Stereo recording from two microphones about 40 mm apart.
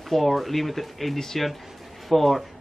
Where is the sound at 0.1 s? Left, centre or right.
Centre.